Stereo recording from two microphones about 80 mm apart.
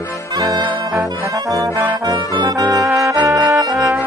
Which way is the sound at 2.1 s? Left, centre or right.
Right.